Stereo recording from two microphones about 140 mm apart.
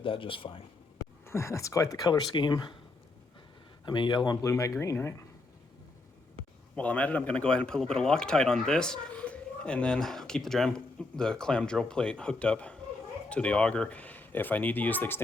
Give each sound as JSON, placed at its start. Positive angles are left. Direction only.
{"t": 0.0, "sound": "speech", "side_deg": 40}
{"t": 1.2, "sound": "speech", "side_deg": 20}
{"t": 3.8, "sound": "speech", "side_deg": 35}
{"t": 4.4, "sound": "speech", "side_deg": 20}
{"t": 6.7, "sound": "speech", "side_deg": 10}